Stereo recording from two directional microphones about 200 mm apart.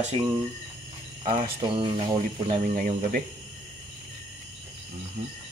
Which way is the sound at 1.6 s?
25° right (ahead or behind).